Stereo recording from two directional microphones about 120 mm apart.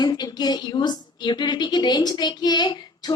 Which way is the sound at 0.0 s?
35° left (ahead or behind).